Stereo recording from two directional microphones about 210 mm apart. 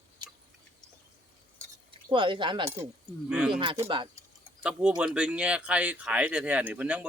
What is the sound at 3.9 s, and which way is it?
Speech, 25° right (ahead or behind).